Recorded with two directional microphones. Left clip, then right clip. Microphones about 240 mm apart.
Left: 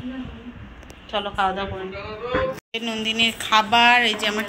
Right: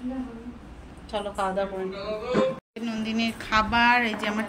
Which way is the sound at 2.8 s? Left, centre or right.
Centre.